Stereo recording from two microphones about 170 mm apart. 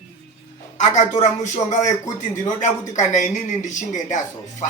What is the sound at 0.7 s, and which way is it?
A man's voice, 45° left (ahead or behind).